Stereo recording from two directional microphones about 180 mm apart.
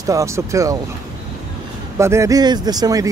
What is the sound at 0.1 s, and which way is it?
Speech, 15° right (ahead or behind).